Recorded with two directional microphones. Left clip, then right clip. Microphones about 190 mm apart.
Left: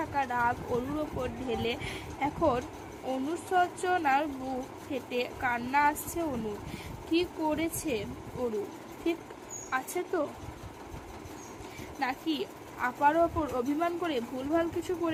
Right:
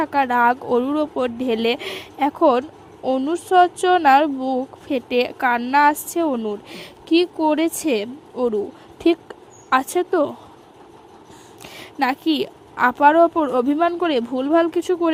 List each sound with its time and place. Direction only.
0.0 s speech: 50° right (ahead or behind)
11.9 s speech: 55° right (ahead or behind)